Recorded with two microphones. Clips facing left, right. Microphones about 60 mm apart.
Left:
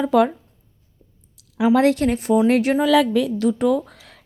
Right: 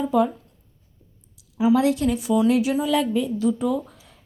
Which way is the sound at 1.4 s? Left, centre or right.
Left.